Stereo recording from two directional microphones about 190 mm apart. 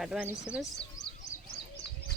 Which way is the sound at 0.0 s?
5° right (ahead or behind).